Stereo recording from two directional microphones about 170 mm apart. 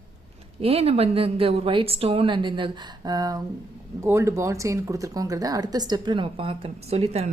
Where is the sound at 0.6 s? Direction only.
35° right (ahead or behind).